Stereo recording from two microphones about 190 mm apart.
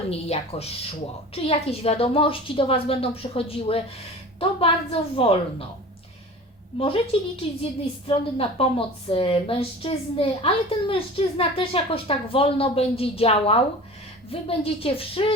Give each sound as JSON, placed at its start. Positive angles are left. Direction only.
{"t": 0.1, "sound": "a woman's voice", "side_deg": 30}
{"t": 6.7, "sound": "a woman's voice", "side_deg": 30}